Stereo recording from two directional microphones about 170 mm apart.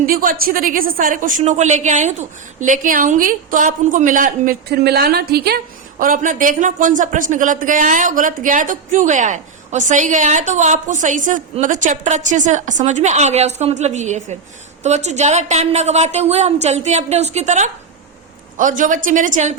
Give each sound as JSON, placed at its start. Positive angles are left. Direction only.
{"t": 0.0, "sound": "speech", "side_deg": -55}
{"t": 6.0, "sound": "a woman's voice", "side_deg": -55}